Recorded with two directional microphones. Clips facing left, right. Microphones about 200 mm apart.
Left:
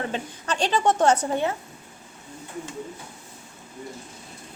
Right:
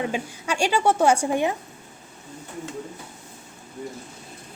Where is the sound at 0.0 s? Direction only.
10° right (ahead or behind).